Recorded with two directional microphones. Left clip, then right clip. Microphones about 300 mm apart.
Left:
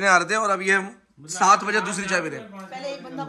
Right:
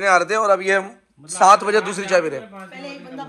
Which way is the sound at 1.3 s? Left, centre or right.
Centre.